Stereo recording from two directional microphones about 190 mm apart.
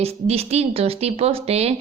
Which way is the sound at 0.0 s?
35° right (ahead or behind).